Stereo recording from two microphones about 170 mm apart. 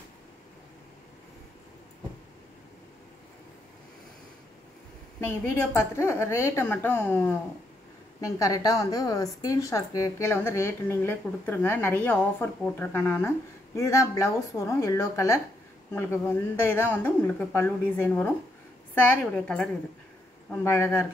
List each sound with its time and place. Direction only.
5.2 s a woman's voice: 15° left (ahead or behind)
20.6 s a woman's voice: 15° left (ahead or behind)